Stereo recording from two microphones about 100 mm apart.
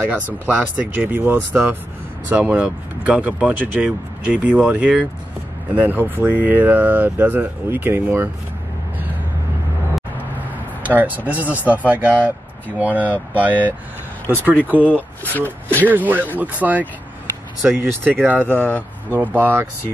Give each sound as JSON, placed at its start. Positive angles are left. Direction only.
{"t": 0.1, "sound": "speech", "side_deg": -15}
{"t": 10.8, "sound": "speech", "side_deg": -15}
{"t": 14.5, "sound": "speech", "side_deg": 15}
{"t": 15.9, "sound": "speech", "side_deg": -20}
{"t": 18.5, "sound": "speech", "side_deg": 20}
{"t": 19.1, "sound": "speech", "side_deg": -20}